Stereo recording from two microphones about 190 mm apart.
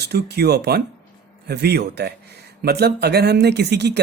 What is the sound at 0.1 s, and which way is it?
Speech, 60° right (ahead or behind).